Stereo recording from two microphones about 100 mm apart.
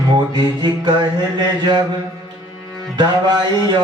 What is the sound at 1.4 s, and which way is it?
Speech, 45° right (ahead or behind).